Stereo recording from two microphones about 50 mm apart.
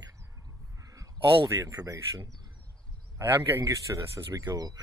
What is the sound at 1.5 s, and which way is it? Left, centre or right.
Speech, right.